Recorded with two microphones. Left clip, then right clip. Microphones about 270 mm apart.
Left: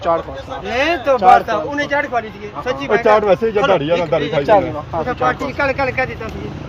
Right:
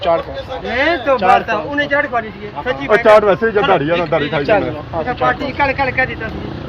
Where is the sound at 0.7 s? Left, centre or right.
Centre.